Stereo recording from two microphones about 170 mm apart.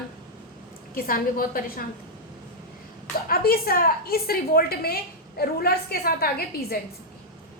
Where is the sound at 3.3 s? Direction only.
60° left (ahead or behind).